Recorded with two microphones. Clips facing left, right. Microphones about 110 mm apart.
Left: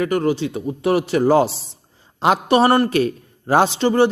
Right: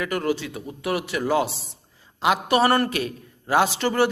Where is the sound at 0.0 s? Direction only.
30° left (ahead or behind).